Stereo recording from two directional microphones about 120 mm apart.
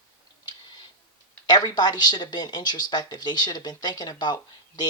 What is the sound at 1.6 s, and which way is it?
Speech, 35° left (ahead or behind).